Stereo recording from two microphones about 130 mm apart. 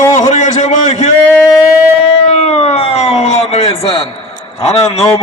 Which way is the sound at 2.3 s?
50° left (ahead or behind).